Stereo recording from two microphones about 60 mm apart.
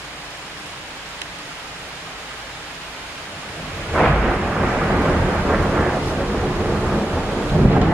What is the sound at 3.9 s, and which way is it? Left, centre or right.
Thunder, centre.